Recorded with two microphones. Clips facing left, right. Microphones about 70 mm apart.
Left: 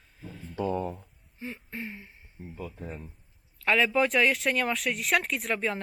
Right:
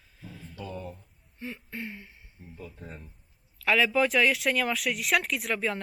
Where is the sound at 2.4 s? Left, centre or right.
Left.